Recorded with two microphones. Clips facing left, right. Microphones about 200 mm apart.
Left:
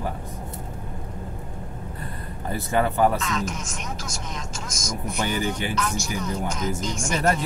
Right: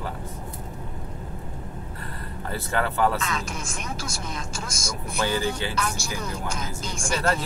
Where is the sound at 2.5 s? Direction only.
15° left (ahead or behind).